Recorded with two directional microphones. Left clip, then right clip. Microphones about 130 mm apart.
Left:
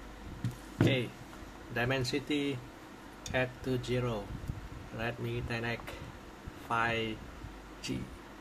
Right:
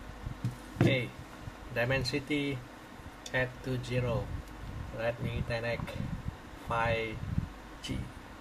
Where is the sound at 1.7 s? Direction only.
30° left (ahead or behind).